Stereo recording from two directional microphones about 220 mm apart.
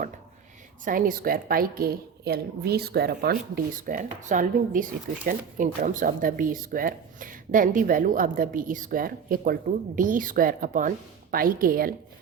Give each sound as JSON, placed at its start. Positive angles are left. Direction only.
{"t": 0.9, "sound": "a woman's voice", "side_deg": -40}